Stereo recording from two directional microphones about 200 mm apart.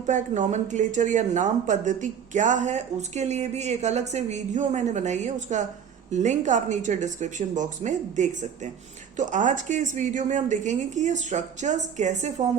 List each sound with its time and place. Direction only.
0.0 s speech: 40° right (ahead or behind)